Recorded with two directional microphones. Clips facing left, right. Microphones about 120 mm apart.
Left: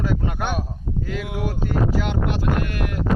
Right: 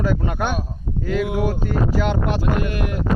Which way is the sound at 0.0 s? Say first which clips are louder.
Right 3 dB; 50° right (ahead or behind).